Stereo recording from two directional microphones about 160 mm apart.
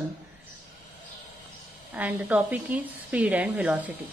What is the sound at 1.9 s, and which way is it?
A woman's voice, 10° right (ahead or behind).